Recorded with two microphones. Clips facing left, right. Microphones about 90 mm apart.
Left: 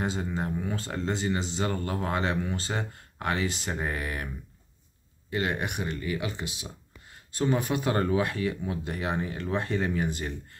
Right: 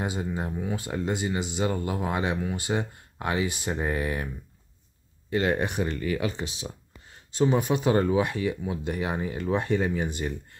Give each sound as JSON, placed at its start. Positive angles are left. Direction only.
{"t": 0.0, "sound": "speech", "side_deg": -15}
{"t": 5.3, "sound": "speech", "side_deg": -30}
{"t": 7.4, "sound": "speech", "side_deg": -20}